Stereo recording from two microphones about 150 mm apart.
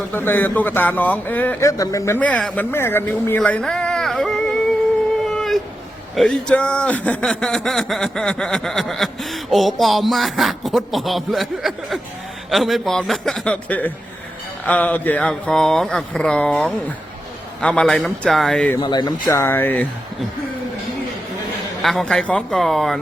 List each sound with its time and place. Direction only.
0.1 s speech: 15° left (ahead or behind)
5.2 s a sound: centre (ahead or behind)
6.1 s speech: 5° left (ahead or behind)
18.8 s speech: 30° left (ahead or behind)
19.3 s speech: 15° left (ahead or behind)
21.8 s speech: centre (ahead or behind)